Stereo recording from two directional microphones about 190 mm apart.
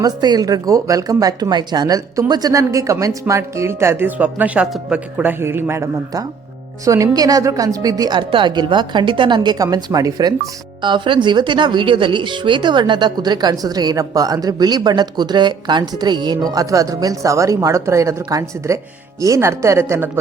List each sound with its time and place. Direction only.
0.0 s a woman's voice: 20° right (ahead or behind)